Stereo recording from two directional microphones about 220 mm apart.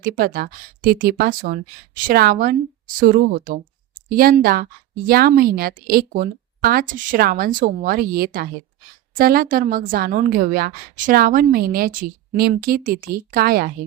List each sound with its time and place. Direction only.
0.0 s a woman's voice: 40° right (ahead or behind)